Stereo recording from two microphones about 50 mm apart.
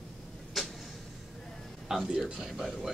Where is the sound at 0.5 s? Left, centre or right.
Centre.